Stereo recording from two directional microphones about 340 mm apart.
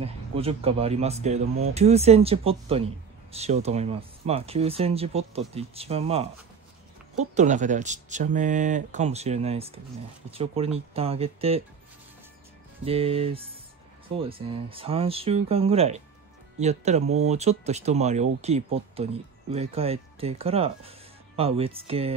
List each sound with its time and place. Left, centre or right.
0.0 s speech: centre
7.3 s speech: right
12.8 s speech: centre